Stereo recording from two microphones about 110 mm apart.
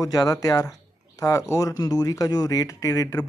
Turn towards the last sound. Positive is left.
turn(degrees=30)  # may be behind; listen again after turning